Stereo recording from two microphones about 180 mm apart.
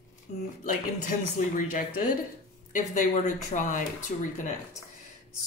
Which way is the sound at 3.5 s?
45° left (ahead or behind).